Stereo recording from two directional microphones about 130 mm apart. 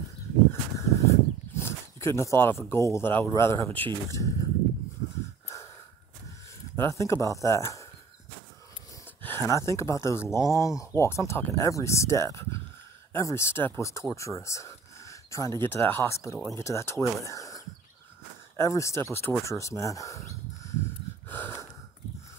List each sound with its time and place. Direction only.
0.5 s a sound: 25° left (ahead or behind)
2.7 s speech: 20° left (ahead or behind)
6.8 s speech: 20° left (ahead or behind)
9.2 s speech: 20° left (ahead or behind)
21.3 s wheeze: 15° left (ahead or behind)